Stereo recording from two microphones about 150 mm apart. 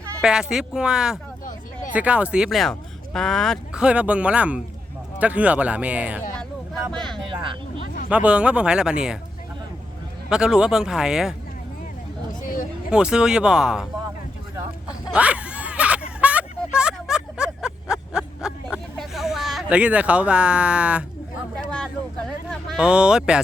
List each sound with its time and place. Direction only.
0.2 s speech: 5° right (ahead or behind)
8.1 s speech: 10° right (ahead or behind)
10.2 s speech: 5° right (ahead or behind)
12.3 s a sound: 60° left (ahead or behind)
12.9 s speech: 5° right (ahead or behind)
15.1 s a sound: 10° right (ahead or behind)
22.4 s speech: centre (ahead or behind)